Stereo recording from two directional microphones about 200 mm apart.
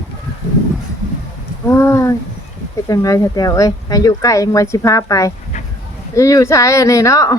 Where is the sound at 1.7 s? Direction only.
15° left (ahead or behind).